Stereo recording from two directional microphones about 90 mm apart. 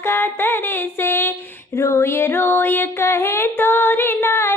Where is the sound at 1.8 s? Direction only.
30° left (ahead or behind).